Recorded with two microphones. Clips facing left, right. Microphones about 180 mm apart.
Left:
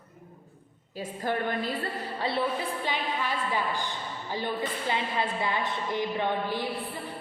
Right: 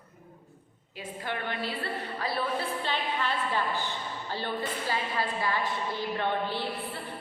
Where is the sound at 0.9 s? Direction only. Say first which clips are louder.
Left 5 dB; 40° left (ahead or behind).